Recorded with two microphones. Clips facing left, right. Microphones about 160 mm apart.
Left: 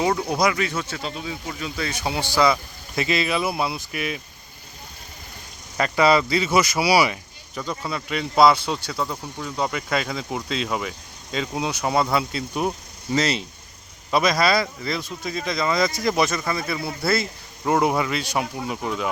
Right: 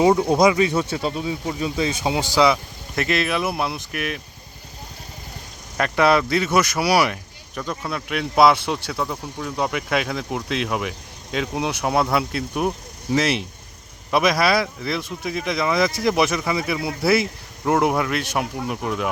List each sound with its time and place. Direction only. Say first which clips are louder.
0.0 s speech: right 6 dB; 25° right (ahead or behind)
2.9 s speech: right 1 dB; centre (ahead or behind)
5.7 s speech: even; centre (ahead or behind)